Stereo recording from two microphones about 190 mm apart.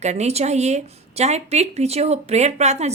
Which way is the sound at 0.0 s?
35° right (ahead or behind).